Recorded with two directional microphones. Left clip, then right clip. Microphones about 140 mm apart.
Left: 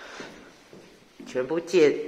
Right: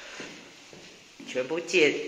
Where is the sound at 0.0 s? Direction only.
60° left (ahead or behind).